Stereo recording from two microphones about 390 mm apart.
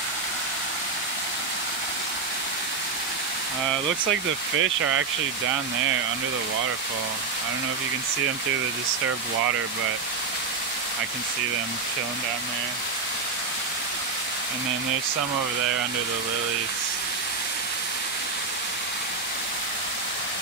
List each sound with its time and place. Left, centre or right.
4.6 s speech: right